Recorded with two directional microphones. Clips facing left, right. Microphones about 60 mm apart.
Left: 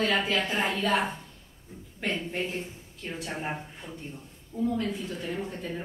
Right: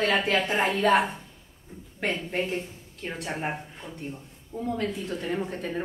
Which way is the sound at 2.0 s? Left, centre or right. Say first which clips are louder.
Right 2 dB; right.